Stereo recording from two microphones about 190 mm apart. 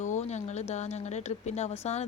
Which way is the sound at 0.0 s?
35° left (ahead or behind).